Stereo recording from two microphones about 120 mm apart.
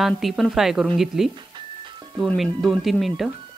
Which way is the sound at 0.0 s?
Centre (ahead or behind).